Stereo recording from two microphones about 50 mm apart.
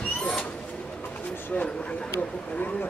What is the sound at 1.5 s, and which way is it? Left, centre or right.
Speech, left.